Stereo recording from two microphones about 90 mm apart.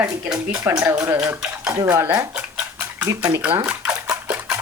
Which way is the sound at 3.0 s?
50° right (ahead or behind).